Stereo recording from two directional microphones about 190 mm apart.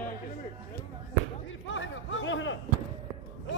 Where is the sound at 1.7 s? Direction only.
90° left.